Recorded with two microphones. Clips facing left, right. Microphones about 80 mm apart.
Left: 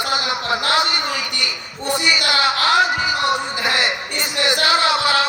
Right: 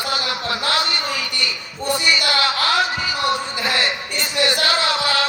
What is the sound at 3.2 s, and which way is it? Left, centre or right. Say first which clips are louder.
Music: left 1 dB; centre.